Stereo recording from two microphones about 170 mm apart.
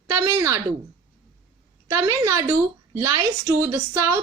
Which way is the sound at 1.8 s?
20° right (ahead or behind).